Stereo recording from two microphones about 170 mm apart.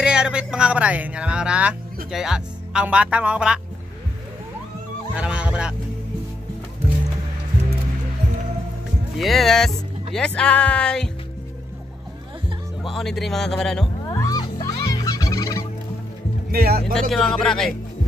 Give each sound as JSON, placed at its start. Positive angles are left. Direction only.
{"t": 0.0, "sound": "speech", "side_deg": -5}
{"t": 5.1, "sound": "fowl", "side_deg": -5}
{"t": 9.2, "sound": "speech", "side_deg": 0}
{"t": 12.9, "sound": "speech", "side_deg": 0}
{"t": 14.0, "sound": "music", "side_deg": 20}
{"t": 14.7, "sound": "fowl", "side_deg": 20}
{"t": 16.5, "sound": "speech", "side_deg": -65}
{"t": 17.1, "sound": "speech", "side_deg": 5}